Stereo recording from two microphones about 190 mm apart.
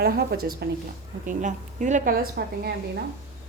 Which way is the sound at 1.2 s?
40° right (ahead or behind).